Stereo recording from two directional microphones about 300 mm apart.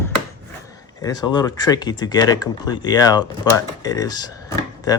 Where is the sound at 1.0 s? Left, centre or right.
Centre.